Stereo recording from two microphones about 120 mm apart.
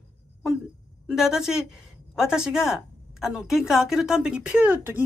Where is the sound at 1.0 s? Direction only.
5° right (ahead or behind).